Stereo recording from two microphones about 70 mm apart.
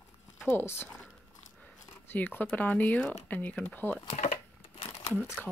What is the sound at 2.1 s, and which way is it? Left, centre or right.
Speech, left.